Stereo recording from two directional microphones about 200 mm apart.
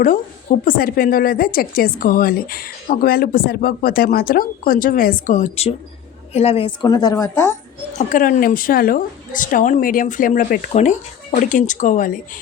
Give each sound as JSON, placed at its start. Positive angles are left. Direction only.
{"t": 0.6, "sound": "a woman's voice", "side_deg": 45}
{"t": 6.8, "sound": "a woman's voice", "side_deg": 15}
{"t": 7.9, "sound": "a woman's voice", "side_deg": 40}